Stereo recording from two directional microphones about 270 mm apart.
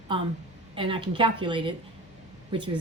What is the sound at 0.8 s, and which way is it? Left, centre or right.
A woman's voice, centre.